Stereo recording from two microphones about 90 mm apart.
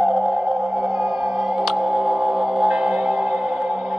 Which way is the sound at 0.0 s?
Centre (ahead or behind).